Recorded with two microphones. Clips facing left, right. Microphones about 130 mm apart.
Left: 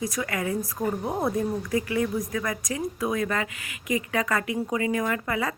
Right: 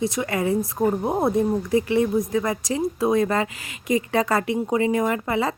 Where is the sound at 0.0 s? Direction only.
25° right (ahead or behind).